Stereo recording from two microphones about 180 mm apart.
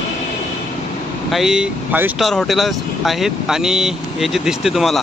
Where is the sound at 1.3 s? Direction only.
Centre (ahead or behind).